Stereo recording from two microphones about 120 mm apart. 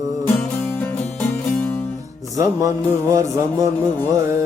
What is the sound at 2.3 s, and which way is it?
Music, 25° right (ahead or behind).